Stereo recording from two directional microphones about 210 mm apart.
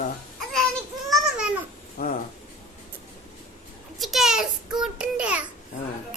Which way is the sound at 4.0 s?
Centre (ahead or behind).